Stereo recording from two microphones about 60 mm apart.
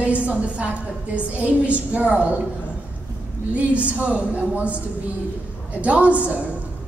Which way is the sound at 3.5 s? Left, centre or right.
Right.